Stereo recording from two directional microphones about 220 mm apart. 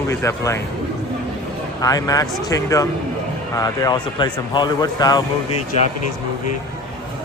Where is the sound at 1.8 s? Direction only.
15° left (ahead or behind).